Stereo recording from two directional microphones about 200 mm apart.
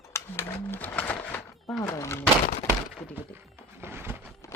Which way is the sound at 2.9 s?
5° left (ahead or behind).